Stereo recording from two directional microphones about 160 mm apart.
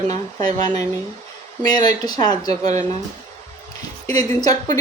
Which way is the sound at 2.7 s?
50° right (ahead or behind).